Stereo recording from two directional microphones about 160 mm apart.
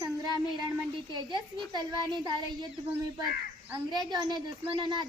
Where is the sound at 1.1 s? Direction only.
25° right (ahead or behind).